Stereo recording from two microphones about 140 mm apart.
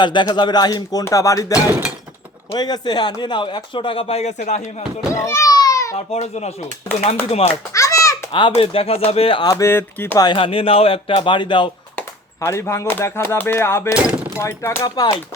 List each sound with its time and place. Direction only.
0.0 s speech: 35° left (ahead or behind); by 4.7 s 60° left (ahead or behind)
5.1 s a sound: 20° left (ahead or behind)
6.1 s speech: 50° left (ahead or behind)
7.7 s children playing: 20° left (ahead or behind)
8.3 s speech: 35° left (ahead or behind)
9.5 s speech: 20° left (ahead or behind)
10.2 s speech: 35° left (ahead or behind)
11.9 s speech: 20° left (ahead or behind)